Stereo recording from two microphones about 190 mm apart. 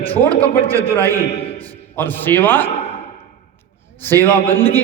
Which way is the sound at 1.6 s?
10° left (ahead or behind).